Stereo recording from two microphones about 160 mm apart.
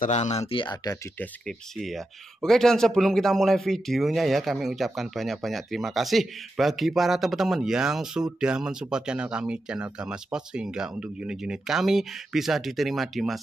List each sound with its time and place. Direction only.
0.0 s speech: 45° left (ahead or behind); by 0.9 s 30° left (ahead or behind)
1.8 s speech: centre (ahead or behind)